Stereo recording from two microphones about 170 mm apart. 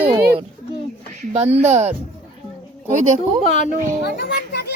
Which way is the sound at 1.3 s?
40° right (ahead or behind).